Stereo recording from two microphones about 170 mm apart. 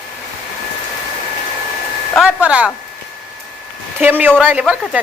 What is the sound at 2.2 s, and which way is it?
Speech, 5° right (ahead or behind).